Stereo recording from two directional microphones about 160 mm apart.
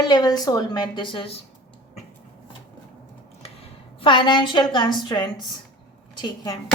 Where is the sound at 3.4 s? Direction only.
35° left (ahead or behind).